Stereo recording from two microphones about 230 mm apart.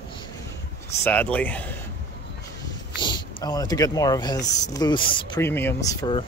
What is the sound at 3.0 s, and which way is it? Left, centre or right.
A man's voice, centre.